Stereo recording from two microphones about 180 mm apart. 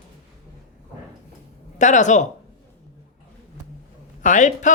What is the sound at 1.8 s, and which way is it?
Speech, 45° left (ahead or behind).